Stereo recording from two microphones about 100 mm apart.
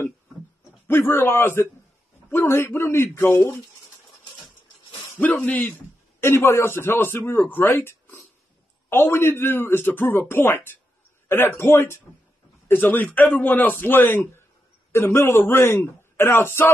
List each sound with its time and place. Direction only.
0.8 s a man's voice: 25° left (ahead or behind)
5.2 s speech: 15° left (ahead or behind)
6.2 s a man's voice: 25° left (ahead or behind)